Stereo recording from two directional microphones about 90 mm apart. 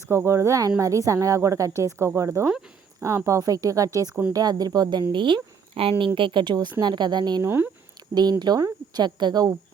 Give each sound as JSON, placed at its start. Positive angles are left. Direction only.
{"t": 0.1, "sound": "a woman's voice", "side_deg": -30}
{"t": 5.1, "sound": "speech", "side_deg": -65}
{"t": 6.1, "sound": "a woman's voice", "side_deg": -65}
{"t": 7.4, "sound": "speech", "side_deg": -25}
{"t": 8.1, "sound": "a woman's voice", "side_deg": -50}